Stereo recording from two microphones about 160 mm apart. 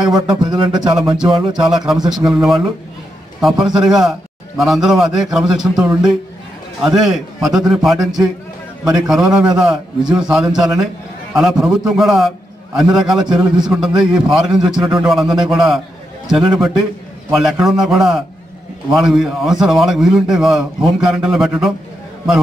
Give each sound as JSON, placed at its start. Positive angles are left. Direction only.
{"t": 0.1, "sound": "speech", "side_deg": -25}
{"t": 1.2, "sound": "a man's voice", "side_deg": -5}
{"t": 3.6, "sound": "a man's voice", "side_deg": -5}